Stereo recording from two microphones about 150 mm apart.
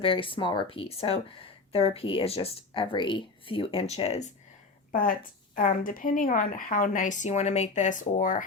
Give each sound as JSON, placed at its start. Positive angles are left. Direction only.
{"t": 0.0, "sound": "speech", "side_deg": 35}
{"t": 4.9, "sound": "a woman's voice", "side_deg": 65}